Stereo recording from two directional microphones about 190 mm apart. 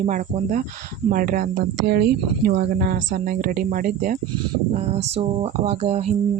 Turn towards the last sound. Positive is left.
turn(degrees=-35)  # may be behind; listen again after turning